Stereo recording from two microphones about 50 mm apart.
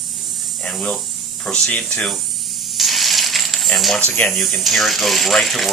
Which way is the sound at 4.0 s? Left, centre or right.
Left.